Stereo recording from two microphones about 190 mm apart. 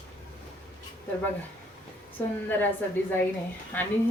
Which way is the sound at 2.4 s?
10° left (ahead or behind).